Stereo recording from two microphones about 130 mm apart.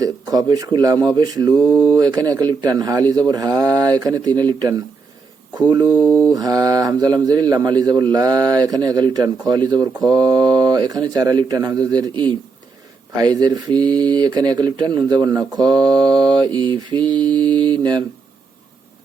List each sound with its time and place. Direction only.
0.0 s a man's voice: 30° right (ahead or behind)
6.0 s mantra: 10° left (ahead or behind)
6.3 s a man's voice: 30° right (ahead or behind)